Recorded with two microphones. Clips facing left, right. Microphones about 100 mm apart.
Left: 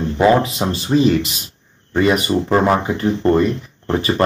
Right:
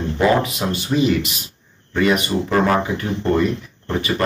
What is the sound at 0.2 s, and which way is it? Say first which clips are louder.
Speech: left 3 dB; 30° left (ahead or behind).